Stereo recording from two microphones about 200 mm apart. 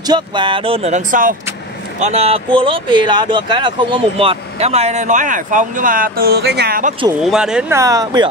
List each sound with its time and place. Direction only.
0.0 s speech: 20° right (ahead or behind); by 6.9 s 50° right (ahead or behind)
7.2 s speech: 5° right (ahead or behind)
7.7 s speech: 15° right (ahead or behind)